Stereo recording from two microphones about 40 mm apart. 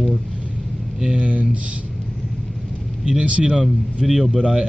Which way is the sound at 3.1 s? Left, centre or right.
Right.